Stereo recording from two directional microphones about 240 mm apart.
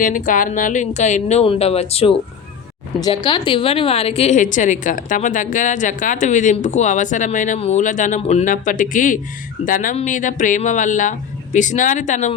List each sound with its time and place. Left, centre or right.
0.0 s a woman's voice: left